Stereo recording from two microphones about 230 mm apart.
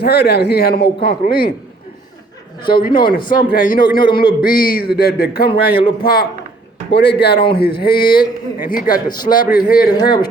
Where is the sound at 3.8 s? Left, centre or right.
Centre.